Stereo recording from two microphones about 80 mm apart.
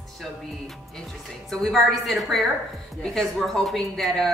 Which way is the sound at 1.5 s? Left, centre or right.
Centre.